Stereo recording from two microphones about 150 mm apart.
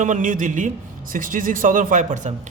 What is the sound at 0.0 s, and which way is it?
A man's voice, 55° right (ahead or behind).